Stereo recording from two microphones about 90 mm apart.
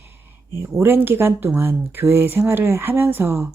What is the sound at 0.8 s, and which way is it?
Speech, 25° right (ahead or behind).